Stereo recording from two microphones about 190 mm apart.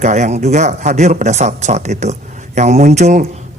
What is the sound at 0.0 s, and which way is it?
A man's voice, 40° right (ahead or behind).